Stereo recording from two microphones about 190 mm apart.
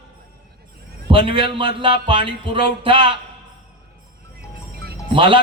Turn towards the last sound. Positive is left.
turn(degrees=-25)  # may be behind; listen again after turning